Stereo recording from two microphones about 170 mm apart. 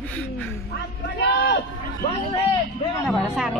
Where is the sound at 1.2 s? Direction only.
90° left.